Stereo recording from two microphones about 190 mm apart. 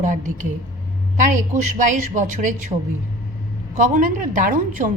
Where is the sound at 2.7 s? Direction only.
30° right (ahead or behind).